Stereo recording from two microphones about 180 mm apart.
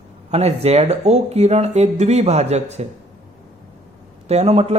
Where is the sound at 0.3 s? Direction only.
35° right (ahead or behind).